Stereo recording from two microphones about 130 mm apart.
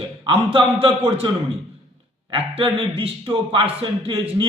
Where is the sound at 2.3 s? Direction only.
45° right (ahead or behind).